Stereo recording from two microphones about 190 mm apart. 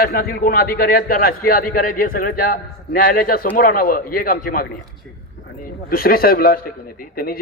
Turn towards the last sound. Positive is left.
turn(degrees=50)  # may be behind; listen again after turning